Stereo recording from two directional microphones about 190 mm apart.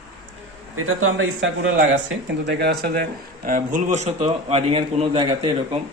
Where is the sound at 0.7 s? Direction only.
90° right.